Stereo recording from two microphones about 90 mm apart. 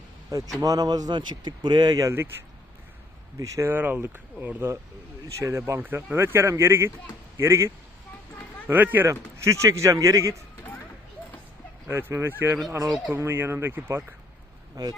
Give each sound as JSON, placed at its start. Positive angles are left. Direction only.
{"t": 0.6, "sound": "speech", "side_deg": -45}
{"t": 3.3, "sound": "speech", "side_deg": -35}
{"t": 3.7, "sound": "speech", "side_deg": -20}
{"t": 5.4, "sound": "speech", "side_deg": -30}
{"t": 8.6, "sound": "speech", "side_deg": -20}
{"t": 9.0, "sound": "speech", "side_deg": -35}
{"t": 11.9, "sound": "speech", "side_deg": -25}
{"t": 14.8, "sound": "speech", "side_deg": -45}